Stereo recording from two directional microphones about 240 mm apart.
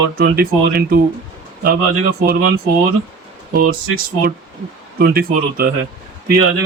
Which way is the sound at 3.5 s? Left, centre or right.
Right.